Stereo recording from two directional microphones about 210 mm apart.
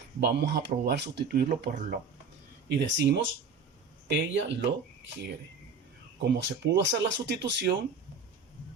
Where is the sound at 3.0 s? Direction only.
55° right (ahead or behind).